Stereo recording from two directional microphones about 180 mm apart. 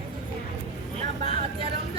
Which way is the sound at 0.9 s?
35° right (ahead or behind).